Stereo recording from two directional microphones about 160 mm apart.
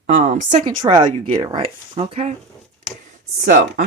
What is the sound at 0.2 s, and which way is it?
Speech, 45° right (ahead or behind).